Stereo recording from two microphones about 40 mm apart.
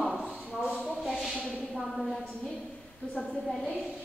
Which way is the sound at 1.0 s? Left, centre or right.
Centre.